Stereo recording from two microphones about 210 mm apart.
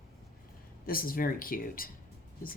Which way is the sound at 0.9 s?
45° left (ahead or behind).